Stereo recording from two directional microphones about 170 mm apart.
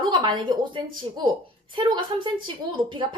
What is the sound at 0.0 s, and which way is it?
A woman's voice, 30° right (ahead or behind).